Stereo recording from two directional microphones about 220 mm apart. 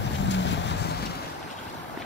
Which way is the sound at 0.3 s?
55° left (ahead or behind).